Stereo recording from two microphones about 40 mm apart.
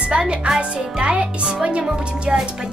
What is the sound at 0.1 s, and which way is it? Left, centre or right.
Speech, right.